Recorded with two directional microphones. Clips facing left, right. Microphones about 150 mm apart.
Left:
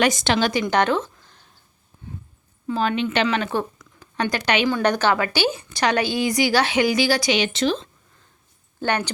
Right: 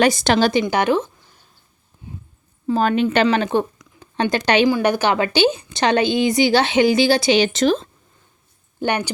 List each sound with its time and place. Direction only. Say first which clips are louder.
0.0 s a woman's voice: right 4 dB; 35° right (ahead or behind)
0.6 s speech: right 2 dB; 10° right (ahead or behind)
2.6 s a woman's voice: right 5 dB; 45° right (ahead or behind)
4.0 s speech: right 4 dB; 25° right (ahead or behind)
4.7 s a woman's voice: right 2 dB; 10° right (ahead or behind)
5.1 s speech: right 5 dB; 20° right (ahead or behind); by 7.9 s 45° right (ahead or behind)
8.8 s a woman's voice: right 2 dB; 15° right (ahead or behind)